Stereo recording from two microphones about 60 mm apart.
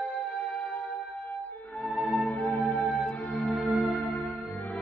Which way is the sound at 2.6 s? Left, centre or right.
Left.